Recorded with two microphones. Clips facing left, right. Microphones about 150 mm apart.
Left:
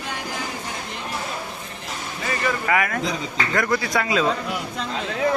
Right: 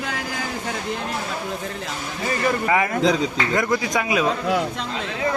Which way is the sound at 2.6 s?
25° right (ahead or behind).